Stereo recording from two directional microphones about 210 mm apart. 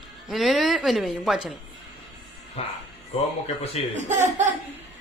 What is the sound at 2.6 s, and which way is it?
Speech, 30° left (ahead or behind).